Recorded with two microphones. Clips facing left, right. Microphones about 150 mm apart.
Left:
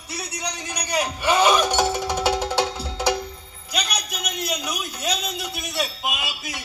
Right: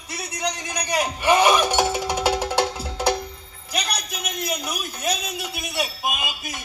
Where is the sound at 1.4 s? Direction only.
10° right (ahead or behind).